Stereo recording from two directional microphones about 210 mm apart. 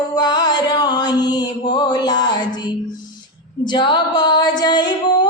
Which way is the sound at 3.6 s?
20° left (ahead or behind).